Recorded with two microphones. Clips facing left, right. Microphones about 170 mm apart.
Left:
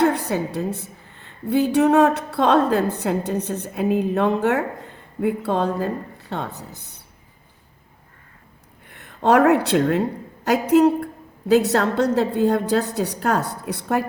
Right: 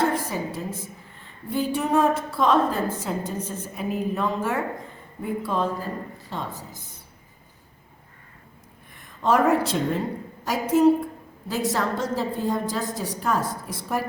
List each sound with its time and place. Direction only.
0.0 s a woman's voice: 70° left (ahead or behind)
8.9 s a woman's voice: 70° left (ahead or behind)